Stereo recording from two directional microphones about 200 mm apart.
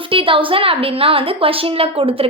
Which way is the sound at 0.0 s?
25° right (ahead or behind).